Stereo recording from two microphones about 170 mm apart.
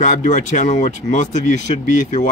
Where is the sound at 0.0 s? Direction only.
45° left (ahead or behind).